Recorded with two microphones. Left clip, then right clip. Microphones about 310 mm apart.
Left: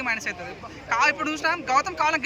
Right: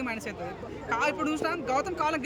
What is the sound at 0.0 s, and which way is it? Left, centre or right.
Speech, centre.